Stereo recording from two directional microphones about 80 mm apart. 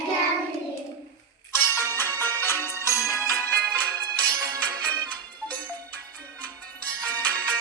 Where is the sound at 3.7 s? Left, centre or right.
Centre.